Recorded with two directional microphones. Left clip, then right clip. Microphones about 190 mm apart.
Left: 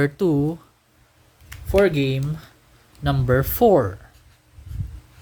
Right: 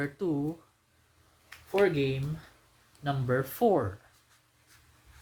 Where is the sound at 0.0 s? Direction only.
60° left (ahead or behind).